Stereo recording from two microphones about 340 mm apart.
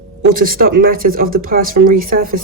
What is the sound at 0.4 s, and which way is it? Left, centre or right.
Speech, right.